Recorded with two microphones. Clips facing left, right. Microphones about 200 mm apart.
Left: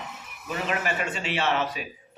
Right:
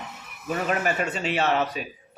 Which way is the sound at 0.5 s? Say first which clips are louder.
Right 3 dB; 45° right (ahead or behind).